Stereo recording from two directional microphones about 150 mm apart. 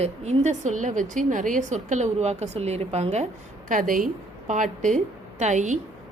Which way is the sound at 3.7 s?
65° right (ahead or behind).